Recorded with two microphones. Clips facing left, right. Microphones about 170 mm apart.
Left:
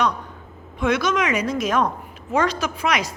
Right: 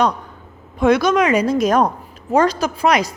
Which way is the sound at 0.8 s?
35° right (ahead or behind).